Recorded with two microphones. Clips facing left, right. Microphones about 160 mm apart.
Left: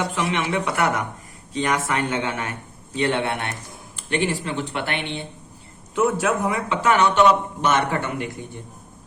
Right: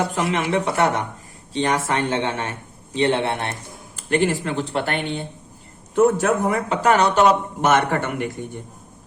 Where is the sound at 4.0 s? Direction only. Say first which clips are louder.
Right 4 dB; 45° right (ahead or behind).